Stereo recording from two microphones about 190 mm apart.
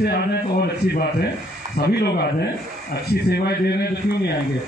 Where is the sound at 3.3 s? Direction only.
55° left (ahead or behind).